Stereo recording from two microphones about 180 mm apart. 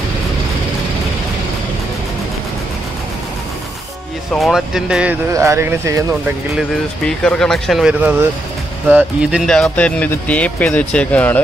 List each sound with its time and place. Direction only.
4.3 s speech: centre (ahead or behind)
5.3 s speech: 15° right (ahead or behind)
7.1 s speech: 5° left (ahead or behind)
9.5 s speech: 5° left (ahead or behind)